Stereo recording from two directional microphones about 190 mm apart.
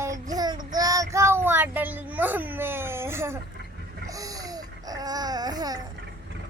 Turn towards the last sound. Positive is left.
turn(degrees=-20)  # may be behind; listen again after turning